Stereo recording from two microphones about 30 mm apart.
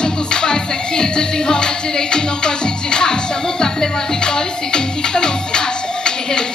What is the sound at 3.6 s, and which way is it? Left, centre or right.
Music, left.